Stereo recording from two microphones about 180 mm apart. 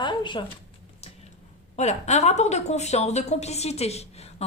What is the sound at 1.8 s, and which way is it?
A woman's voice, 40° left (ahead or behind).